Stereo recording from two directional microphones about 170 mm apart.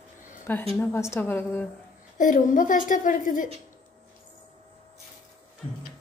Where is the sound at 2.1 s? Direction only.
50° left (ahead or behind).